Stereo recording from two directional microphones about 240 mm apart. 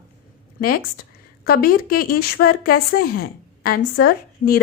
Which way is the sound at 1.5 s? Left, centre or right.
Left.